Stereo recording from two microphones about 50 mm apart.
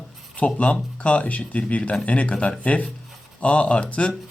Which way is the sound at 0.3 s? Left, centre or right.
Left.